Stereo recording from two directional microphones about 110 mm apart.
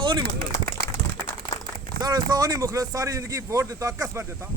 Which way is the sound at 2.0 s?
40° right (ahead or behind).